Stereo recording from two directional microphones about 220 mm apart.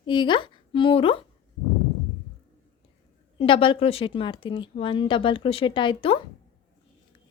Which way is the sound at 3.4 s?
25° left (ahead or behind).